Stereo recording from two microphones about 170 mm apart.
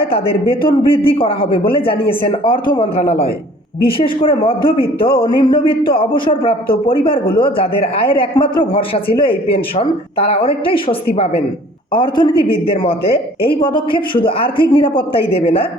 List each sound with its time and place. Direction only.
0.1 s a man's voice: 30° left (ahead or behind)
3.8 s a man's voice: 30° left (ahead or behind)